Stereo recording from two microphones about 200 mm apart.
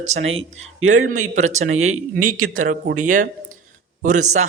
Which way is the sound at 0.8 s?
90° right.